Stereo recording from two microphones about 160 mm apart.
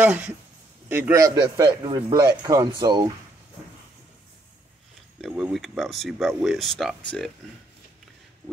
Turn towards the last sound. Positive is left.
turn(degrees=5)  # may be behind; listen again after turning